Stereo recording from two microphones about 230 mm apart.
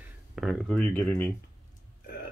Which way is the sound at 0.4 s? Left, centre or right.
Centre.